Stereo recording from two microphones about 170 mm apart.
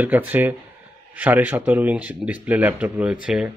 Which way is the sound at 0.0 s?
10° right (ahead or behind).